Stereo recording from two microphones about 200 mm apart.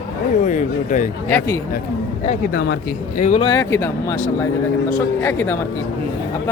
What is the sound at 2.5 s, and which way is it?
Speech, 55° left (ahead or behind).